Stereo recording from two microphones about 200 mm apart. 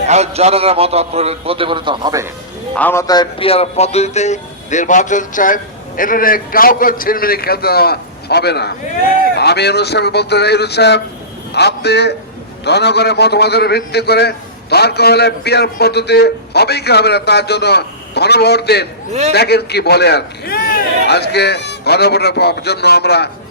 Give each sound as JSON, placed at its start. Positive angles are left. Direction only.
{"t": 0.0, "sound": "a man's voice", "side_deg": -35}
{"t": 2.7, "sound": "a man's voice", "side_deg": 10}